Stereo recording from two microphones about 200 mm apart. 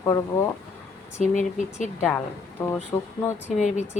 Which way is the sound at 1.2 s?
35° left (ahead or behind).